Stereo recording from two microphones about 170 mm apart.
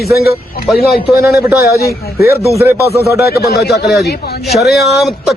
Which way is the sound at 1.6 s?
65° left (ahead or behind).